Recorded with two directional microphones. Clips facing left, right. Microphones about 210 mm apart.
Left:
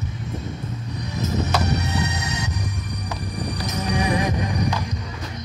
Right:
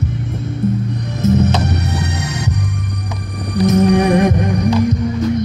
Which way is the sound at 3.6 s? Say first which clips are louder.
Right 13 dB; 55° right (ahead or behind).